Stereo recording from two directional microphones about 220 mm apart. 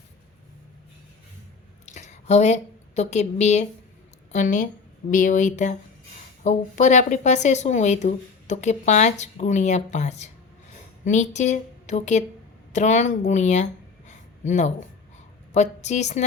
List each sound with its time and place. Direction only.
1.9 s a woman's voice: 35° left (ahead or behind)
14.1 s a sound: 30° left (ahead or behind)
15.5 s speech: 30° left (ahead or behind)